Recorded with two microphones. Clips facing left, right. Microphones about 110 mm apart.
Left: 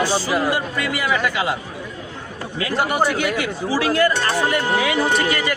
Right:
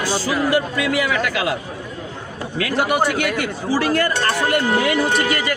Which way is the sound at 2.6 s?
70° right (ahead or behind).